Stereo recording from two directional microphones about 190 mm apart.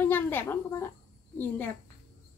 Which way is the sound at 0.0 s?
10° left (ahead or behind).